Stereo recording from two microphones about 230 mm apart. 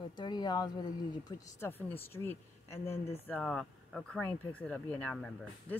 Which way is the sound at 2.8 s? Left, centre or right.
Left.